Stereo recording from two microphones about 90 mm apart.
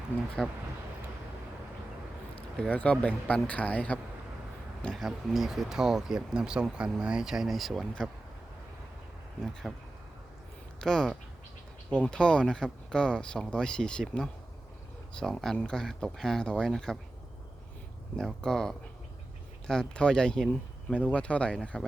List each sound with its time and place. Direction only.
0.1 s speech: 20° left (ahead or behind)
2.6 s speech: 15° left (ahead or behind)
4.9 s speech: 5° right (ahead or behind)
9.4 s speech: 5° left (ahead or behind)
10.8 s speech: 5° left (ahead or behind)
18.2 s speech: 5° left (ahead or behind)